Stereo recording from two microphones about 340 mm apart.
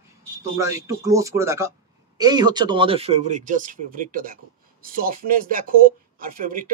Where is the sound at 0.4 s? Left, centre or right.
Centre.